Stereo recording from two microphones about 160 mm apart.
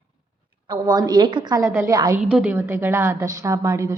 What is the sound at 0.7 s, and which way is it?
A woman's voice, 25° right (ahead or behind).